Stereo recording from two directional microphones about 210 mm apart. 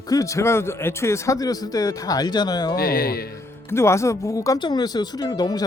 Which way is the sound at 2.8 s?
45° left (ahead or behind).